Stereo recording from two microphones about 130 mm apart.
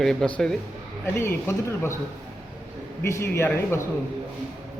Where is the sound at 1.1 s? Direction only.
20° left (ahead or behind).